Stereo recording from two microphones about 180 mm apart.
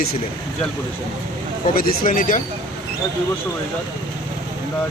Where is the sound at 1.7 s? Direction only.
50° left (ahead or behind).